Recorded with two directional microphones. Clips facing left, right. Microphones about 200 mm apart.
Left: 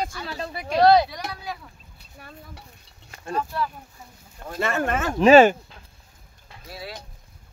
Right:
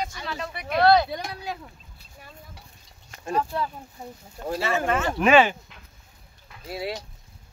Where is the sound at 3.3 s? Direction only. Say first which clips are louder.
Right 1 dB; 20° right (ahead or behind).